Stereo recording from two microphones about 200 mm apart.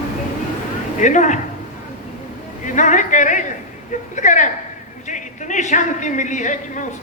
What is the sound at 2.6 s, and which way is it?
A woman's voice, 40° left (ahead or behind).